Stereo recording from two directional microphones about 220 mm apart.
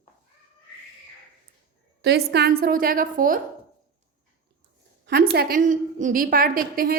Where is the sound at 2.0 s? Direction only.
50° right (ahead or behind).